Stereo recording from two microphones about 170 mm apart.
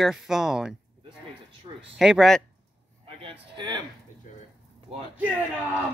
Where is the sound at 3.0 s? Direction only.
35° right (ahead or behind).